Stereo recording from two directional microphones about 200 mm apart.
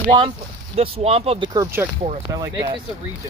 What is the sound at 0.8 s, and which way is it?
Speech, 30° right (ahead or behind).